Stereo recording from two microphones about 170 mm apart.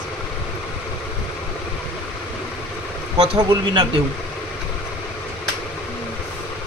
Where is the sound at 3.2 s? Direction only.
30° right (ahead or behind).